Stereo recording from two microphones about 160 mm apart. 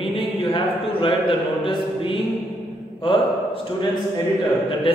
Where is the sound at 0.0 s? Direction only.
35° left (ahead or behind).